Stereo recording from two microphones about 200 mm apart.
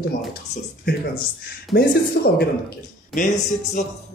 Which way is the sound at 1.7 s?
55° left (ahead or behind).